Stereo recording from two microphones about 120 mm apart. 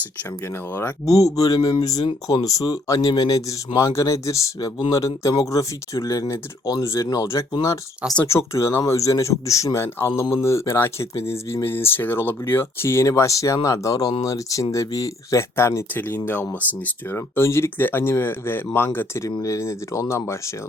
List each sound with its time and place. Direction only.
0.7 s speech: 15° left (ahead or behind)
1.0 s speech: 30° left (ahead or behind)